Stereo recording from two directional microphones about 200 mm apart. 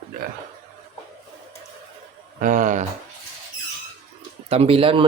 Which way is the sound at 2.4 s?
40° right (ahead or behind).